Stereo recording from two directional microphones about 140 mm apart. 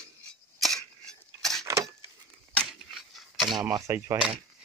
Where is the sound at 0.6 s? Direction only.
5° left (ahead or behind).